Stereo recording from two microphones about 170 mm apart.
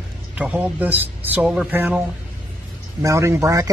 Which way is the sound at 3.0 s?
15° right (ahead or behind).